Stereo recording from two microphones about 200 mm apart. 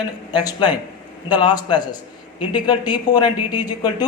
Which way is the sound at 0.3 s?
20° left (ahead or behind).